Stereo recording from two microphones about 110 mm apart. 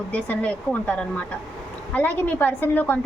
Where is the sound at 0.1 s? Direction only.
15° left (ahead or behind).